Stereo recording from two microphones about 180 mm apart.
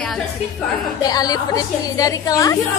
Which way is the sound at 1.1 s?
20° left (ahead or behind).